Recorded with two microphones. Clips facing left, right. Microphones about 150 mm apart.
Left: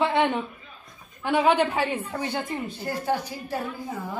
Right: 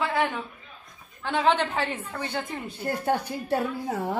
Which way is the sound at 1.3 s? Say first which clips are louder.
Left 3 dB; 10° left (ahead or behind).